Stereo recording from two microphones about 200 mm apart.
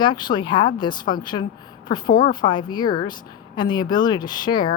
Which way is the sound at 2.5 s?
20° left (ahead or behind).